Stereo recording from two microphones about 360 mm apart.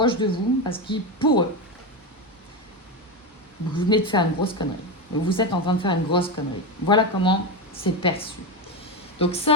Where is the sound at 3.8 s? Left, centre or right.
Centre.